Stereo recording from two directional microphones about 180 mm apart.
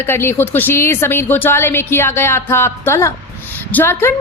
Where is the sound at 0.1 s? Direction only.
15° left (ahead or behind).